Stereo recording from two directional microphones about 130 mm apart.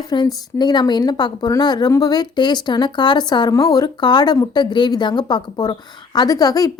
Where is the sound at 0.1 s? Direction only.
35° left (ahead or behind).